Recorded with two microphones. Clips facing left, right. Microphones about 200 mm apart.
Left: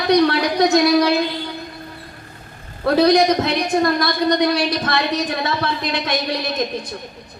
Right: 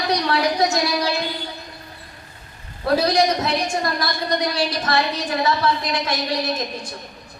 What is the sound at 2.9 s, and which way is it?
A woman's voice, 60° left (ahead or behind).